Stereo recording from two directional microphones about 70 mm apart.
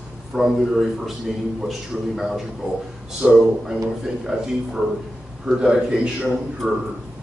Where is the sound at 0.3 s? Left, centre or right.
Centre.